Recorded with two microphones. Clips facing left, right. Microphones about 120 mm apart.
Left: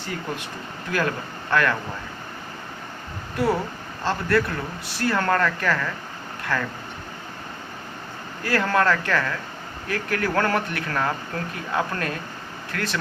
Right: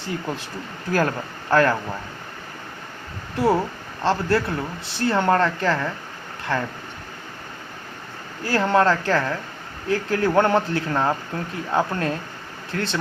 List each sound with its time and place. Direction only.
0.9 s speech: 35° right (ahead or behind)
3.3 s speech: 25° right (ahead or behind)
8.4 s speech: 25° right (ahead or behind)